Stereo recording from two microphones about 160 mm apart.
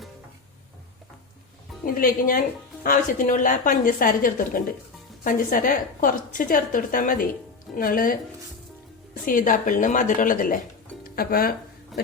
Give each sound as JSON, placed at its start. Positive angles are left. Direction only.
{"t": 1.8, "sound": "a woman's voice", "side_deg": 60}
{"t": 9.2, "sound": "a woman's voice", "side_deg": 55}